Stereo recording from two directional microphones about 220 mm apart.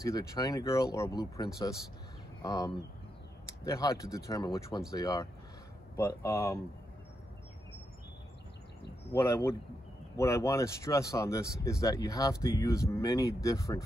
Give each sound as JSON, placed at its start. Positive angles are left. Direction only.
{"t": 0.0, "sound": "speech", "side_deg": 15}
{"t": 9.1, "sound": "speech", "side_deg": 15}